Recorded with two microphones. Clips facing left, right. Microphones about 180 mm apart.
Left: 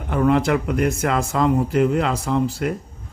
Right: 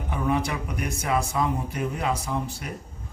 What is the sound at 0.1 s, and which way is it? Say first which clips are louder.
Speech: left 9 dB; 80° left.